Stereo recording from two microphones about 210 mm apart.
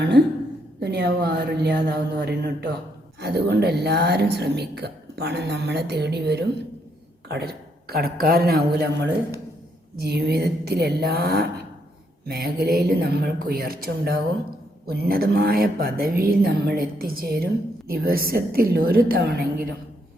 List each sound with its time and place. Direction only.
0.8 s a woman's voice: 55° right (ahead or behind)